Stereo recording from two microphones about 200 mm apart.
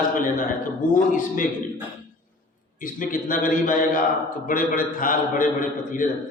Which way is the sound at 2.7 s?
45° left (ahead or behind).